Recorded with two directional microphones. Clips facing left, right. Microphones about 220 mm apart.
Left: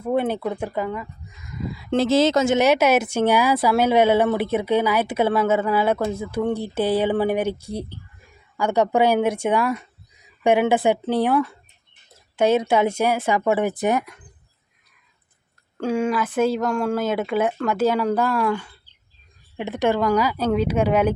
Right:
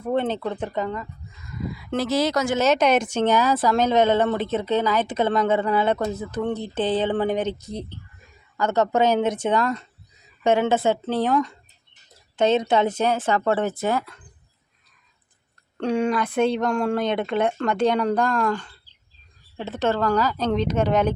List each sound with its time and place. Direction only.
0.0 s speech: 10° left (ahead or behind)
1.5 s speech: 25° left (ahead or behind)
2.6 s speech: 10° left (ahead or behind)
15.8 s a woman's voice: centre (ahead or behind)